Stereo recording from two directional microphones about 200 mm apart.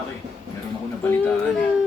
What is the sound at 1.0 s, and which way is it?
Speech, 10° left (ahead or behind).